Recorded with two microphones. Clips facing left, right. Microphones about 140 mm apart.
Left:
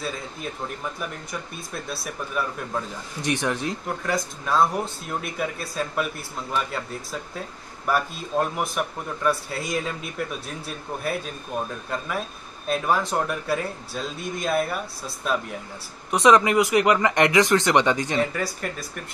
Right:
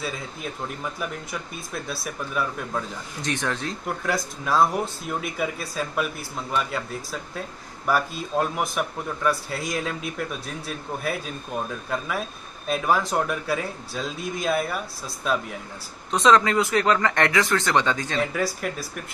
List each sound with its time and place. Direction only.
1.7 s speech: centre (ahead or behind)
3.2 s speech: 15° left (ahead or behind)
3.8 s speech: 5° right (ahead or behind)
12.6 s speech: centre (ahead or behind)
16.1 s speech: 15° left (ahead or behind)
18.3 s speech: centre (ahead or behind)